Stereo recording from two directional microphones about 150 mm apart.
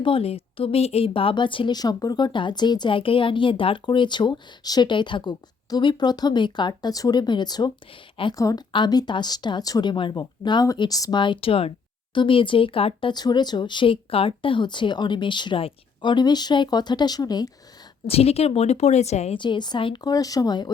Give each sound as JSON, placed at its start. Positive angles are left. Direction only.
{"t": 0.0, "sound": "speech", "side_deg": 40}
{"t": 18.0, "sound": "speech", "side_deg": 40}
{"t": 19.4, "sound": "speech", "side_deg": 30}